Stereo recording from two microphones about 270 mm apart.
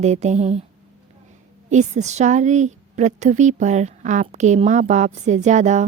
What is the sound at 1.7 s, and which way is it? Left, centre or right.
A woman's voice, right.